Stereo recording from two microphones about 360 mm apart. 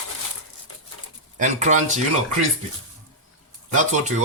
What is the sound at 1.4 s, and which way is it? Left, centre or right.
Speech, centre.